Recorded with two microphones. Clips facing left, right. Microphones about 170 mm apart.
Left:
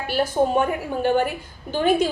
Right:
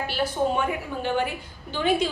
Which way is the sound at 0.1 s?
45° left (ahead or behind).